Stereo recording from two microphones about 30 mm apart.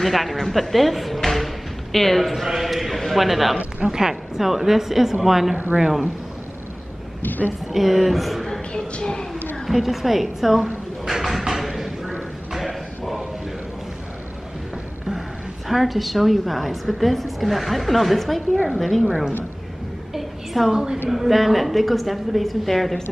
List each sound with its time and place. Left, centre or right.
0.0 s speech: centre
2.4 s a man's voice: centre
3.8 s a woman's voice: centre
5.8 s speech: centre
7.2 s a woman's voice: left
7.7 s a woman's voice: centre
9.7 s a woman's voice: centre
11.1 s bird: centre
11.4 s a sound: centre
15.7 s a woman's voice: centre
19.0 s a woman's voice: centre
20.2 s a sound: centre
20.7 s speech: right
21.1 s a woman's voice: centre